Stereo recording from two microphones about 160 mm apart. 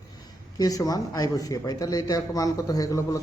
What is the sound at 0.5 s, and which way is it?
Speech, 20° left (ahead or behind).